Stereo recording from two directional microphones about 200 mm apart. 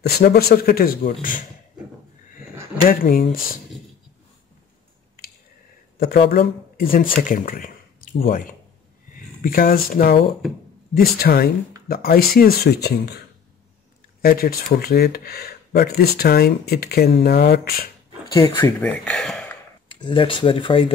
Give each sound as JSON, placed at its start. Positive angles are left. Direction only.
{"t": 0.0, "sound": "speech", "side_deg": 50}
{"t": 2.9, "sound": "speech", "side_deg": 45}
{"t": 5.9, "sound": "speech", "side_deg": 50}
{"t": 14.2, "sound": "speech", "side_deg": 45}
{"t": 18.3, "sound": "speech", "side_deg": 15}
{"t": 18.8, "sound": "speech", "side_deg": 5}
{"t": 19.9, "sound": "speech", "side_deg": 25}